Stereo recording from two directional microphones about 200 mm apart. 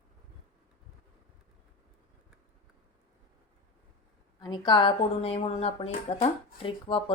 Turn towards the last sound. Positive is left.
turn(degrees=25)  # may be behind; listen again after turning